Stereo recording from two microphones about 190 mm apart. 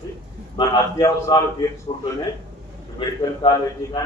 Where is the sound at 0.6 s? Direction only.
15° left (ahead or behind).